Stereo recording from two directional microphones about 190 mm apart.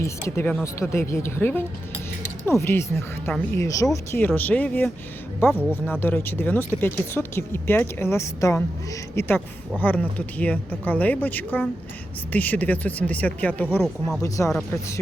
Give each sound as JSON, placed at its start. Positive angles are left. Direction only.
{"t": 0.0, "sound": "speech", "side_deg": 15}